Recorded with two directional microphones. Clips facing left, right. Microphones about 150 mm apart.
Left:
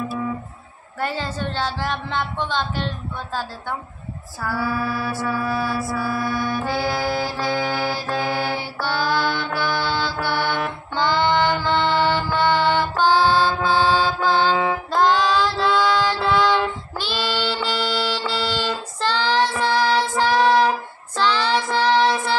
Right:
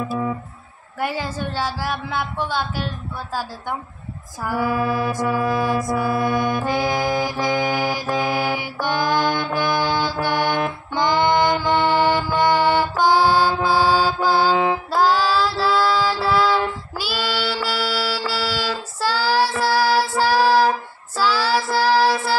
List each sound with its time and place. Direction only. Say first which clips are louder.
0.9 s a woman's voice: right 1 dB; 10° right (ahead or behind)
4.4 s mantra: right 3 dB; 15° right (ahead or behind)
9.5 s music: right 3 dB; 15° right (ahead or behind)
11.0 s mantra: right 1 dB; 15° right (ahead or behind)
19.6 s child singing: right 1 dB; 5° right (ahead or behind)